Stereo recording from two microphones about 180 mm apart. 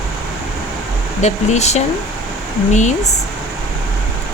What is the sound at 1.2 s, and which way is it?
Speech, 40° left (ahead or behind).